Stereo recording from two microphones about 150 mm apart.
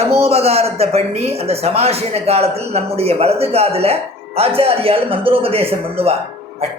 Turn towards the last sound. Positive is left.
turn(degrees=-40)  # may be behind; listen again after turning